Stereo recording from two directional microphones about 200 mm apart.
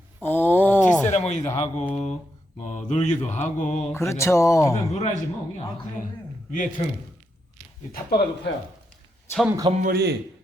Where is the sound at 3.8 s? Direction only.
15° left (ahead or behind).